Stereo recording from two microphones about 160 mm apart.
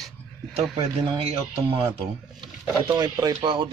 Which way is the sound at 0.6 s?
40° right (ahead or behind).